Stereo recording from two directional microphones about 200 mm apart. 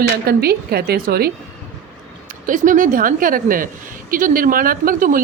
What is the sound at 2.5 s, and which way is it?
Speech, 40° right (ahead or behind).